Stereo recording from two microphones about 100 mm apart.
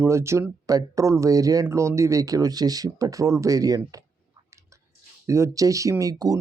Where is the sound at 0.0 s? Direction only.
30° right (ahead or behind).